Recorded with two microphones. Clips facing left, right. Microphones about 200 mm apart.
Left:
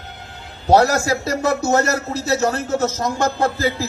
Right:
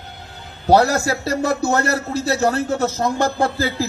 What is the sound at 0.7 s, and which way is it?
A man's voice, 35° right (ahead or behind).